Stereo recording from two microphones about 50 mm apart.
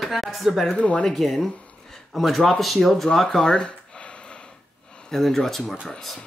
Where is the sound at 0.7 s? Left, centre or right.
Left.